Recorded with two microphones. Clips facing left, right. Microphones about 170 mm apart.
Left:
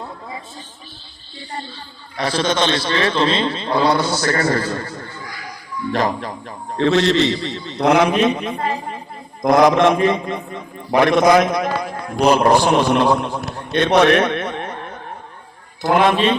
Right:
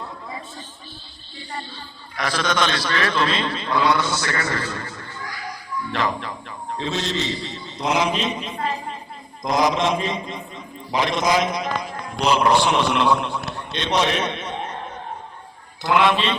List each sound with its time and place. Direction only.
2.1 s a man's voice: 30° left (ahead or behind)
6.7 s a man's voice: 70° left (ahead or behind); by 13.7 s 40° left (ahead or behind)
13.7 s a sound: 55° left (ahead or behind)
15.8 s a man's voice: 45° left (ahead or behind)